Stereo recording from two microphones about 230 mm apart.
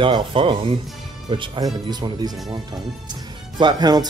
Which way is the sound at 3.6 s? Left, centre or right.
Centre.